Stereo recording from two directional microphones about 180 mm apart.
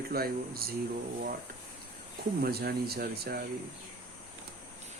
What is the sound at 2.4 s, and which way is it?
Speech, 60° right (ahead or behind).